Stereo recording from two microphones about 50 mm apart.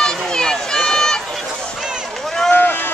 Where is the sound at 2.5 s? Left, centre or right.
Left.